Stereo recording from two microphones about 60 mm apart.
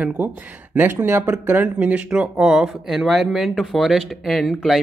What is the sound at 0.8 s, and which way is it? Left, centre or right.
Speech, right.